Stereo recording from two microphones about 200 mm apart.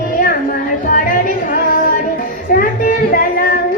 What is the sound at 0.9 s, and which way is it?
Music, 45° left (ahead or behind).